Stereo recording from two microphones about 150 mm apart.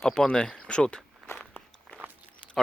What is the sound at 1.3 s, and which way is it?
Walk, 5° left (ahead or behind).